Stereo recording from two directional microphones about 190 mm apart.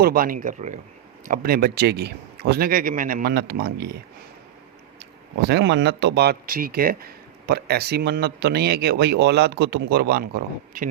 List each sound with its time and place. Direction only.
0.0 s speech: 50° right (ahead or behind)
5.4 s speech: 60° right (ahead or behind)